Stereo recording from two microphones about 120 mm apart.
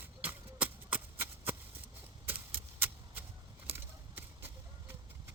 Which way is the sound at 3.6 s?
15° right (ahead or behind).